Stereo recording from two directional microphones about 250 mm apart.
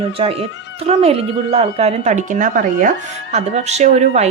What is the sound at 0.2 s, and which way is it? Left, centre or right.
A woman's voice, right.